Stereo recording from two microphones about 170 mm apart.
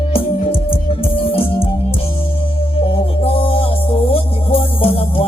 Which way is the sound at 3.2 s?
35° left (ahead or behind).